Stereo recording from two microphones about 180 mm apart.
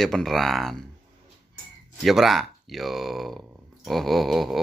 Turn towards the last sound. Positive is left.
turn(degrees=0)  # may be behind; listen again after turning